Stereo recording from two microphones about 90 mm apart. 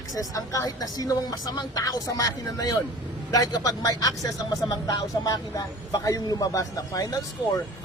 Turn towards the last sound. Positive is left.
turn(degrees=40)  # may be behind; listen again after turning